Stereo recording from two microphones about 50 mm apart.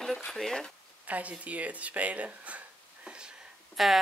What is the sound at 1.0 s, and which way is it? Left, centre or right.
Speech, right.